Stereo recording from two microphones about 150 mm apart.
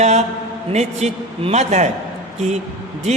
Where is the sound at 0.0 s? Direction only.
50° right (ahead or behind).